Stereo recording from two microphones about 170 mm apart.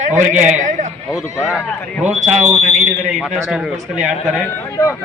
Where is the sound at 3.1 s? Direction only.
Centre (ahead or behind).